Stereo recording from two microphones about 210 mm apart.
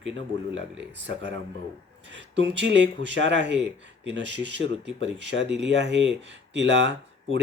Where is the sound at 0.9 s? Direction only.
60° right (ahead or behind).